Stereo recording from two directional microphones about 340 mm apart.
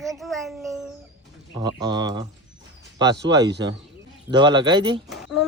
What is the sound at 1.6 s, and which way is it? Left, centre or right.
Speech, centre.